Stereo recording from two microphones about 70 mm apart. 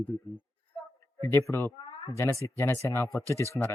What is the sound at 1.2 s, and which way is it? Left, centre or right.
Speech, left.